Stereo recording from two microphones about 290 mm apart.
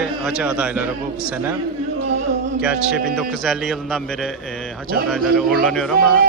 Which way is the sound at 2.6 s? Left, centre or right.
Centre.